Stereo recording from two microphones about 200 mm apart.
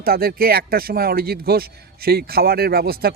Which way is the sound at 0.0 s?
50° right (ahead or behind).